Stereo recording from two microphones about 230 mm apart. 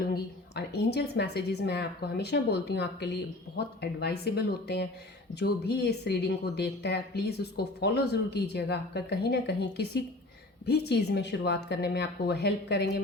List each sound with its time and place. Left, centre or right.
0.1 s speech: left